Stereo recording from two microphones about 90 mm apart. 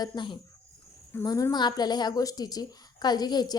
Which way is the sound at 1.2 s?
45° left (ahead or behind).